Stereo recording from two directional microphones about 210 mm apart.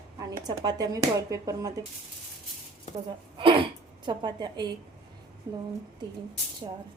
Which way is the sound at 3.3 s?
25° right (ahead or behind).